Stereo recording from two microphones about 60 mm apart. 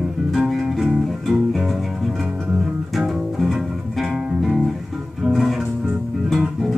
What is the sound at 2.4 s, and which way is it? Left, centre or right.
Music, centre.